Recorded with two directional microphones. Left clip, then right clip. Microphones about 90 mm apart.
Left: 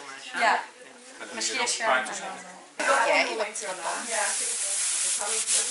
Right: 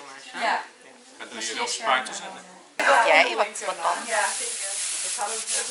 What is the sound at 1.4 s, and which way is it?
Speech, 10° left (ahead or behind).